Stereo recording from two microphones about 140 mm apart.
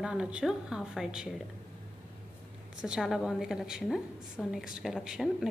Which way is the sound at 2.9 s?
5° right (ahead or behind).